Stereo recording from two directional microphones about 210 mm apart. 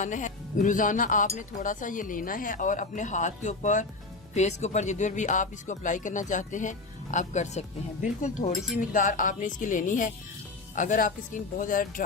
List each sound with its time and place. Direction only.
0.0 s speech: 35° left (ahead or behind)